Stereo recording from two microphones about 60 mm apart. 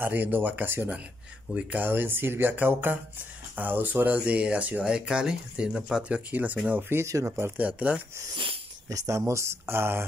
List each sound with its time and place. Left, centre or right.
0.0 s speech: right
1.8 s speech: right; by 6.2 s centre
6.3 s speech: right
6.7 s speech: right
7.5 s speech: right
8.8 s speech: right
9.2 s speech: right